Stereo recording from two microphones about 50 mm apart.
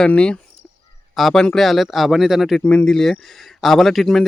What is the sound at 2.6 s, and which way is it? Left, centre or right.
Speech, left.